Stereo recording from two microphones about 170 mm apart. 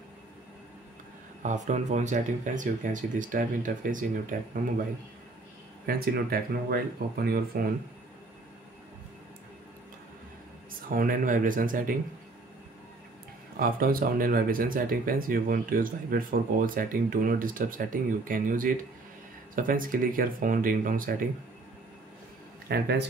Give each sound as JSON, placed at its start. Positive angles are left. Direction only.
{"t": 1.4, "sound": "speech", "side_deg": -45}
{"t": 5.9, "sound": "speech", "side_deg": -60}
{"t": 10.9, "sound": "speech", "side_deg": -55}
{"t": 13.6, "sound": "speech", "side_deg": -55}
{"t": 22.7, "sound": "a man's voice", "side_deg": -75}